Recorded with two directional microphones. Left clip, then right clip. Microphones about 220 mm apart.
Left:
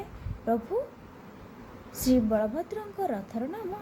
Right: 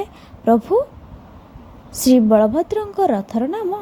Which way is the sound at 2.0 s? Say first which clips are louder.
Right 12 dB; 35° right (ahead or behind).